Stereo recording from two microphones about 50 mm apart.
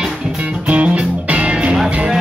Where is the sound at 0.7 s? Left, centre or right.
Right.